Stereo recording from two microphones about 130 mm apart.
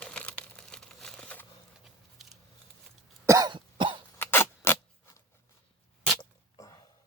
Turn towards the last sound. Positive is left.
turn(degrees=25)  # may be behind; listen again after turning